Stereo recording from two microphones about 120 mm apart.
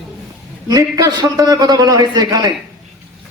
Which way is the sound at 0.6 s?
30° right (ahead or behind).